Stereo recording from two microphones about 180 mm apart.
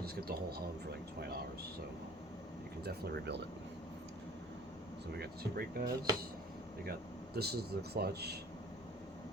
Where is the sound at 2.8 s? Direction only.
65° right (ahead or behind).